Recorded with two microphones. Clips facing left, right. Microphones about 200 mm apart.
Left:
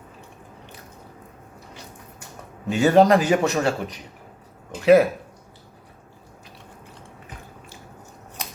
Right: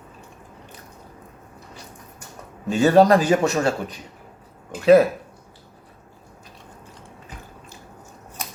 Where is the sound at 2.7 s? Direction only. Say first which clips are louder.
Right 1 dB; 15° left (ahead or behind).